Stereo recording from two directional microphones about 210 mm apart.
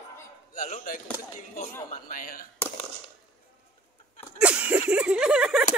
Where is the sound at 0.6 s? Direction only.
40° left (ahead or behind).